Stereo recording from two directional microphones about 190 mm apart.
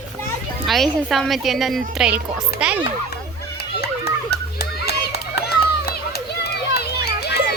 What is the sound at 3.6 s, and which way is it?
Children playing, 60° left (ahead or behind).